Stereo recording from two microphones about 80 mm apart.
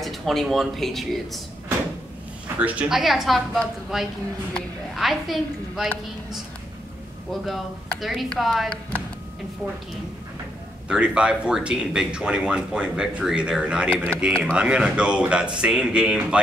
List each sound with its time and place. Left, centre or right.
0.0 s speech: centre
2.4 s a sound: centre
2.9 s a woman's voice: centre
7.2 s speech: centre
10.9 s speech: centre